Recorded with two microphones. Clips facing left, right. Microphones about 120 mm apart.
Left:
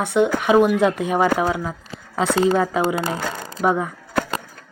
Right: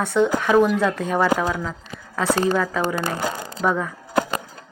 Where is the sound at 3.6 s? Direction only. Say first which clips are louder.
Left 3 dB; 20° left (ahead or behind).